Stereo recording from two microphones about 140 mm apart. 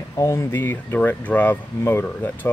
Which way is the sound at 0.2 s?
20° left (ahead or behind).